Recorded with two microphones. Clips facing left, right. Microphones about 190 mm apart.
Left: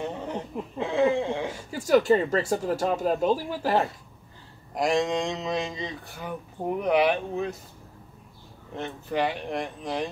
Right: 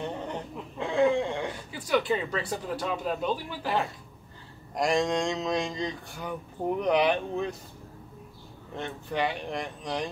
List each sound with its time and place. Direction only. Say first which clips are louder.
0.0 s a sound: left 2 dB; centre (ahead or behind)
1.7 s speech: left 7 dB; 40° left (ahead or behind)
4.7 s speech: left 1 dB; centre (ahead or behind)
8.7 s speech: left 3 dB; centre (ahead or behind)